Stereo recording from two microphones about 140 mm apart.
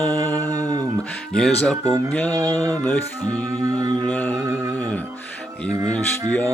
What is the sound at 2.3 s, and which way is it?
Music, 25° right (ahead or behind).